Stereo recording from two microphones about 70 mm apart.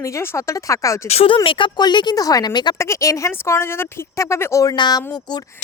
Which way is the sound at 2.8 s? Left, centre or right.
Left.